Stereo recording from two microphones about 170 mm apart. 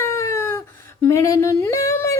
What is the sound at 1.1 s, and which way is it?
Singing, 20° left (ahead or behind).